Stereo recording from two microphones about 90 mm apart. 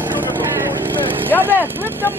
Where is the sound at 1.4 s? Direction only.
25° right (ahead or behind).